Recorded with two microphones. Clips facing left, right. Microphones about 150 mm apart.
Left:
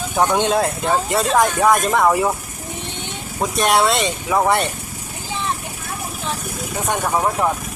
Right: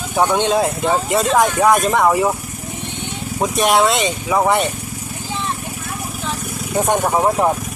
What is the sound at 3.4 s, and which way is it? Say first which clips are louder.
Speech: right 2 dB; centre (ahead or behind).